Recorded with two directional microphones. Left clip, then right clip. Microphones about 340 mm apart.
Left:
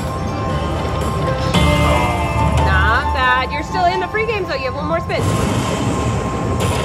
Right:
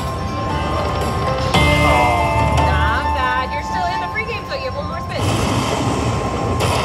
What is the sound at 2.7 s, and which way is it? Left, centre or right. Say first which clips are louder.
Music: left 2 dB; centre.